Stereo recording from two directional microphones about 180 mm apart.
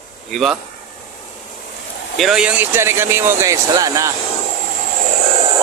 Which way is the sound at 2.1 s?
Centre (ahead or behind).